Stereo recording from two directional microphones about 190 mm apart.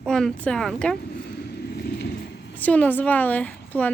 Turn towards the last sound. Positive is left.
turn(degrees=10)  # may be behind; listen again after turning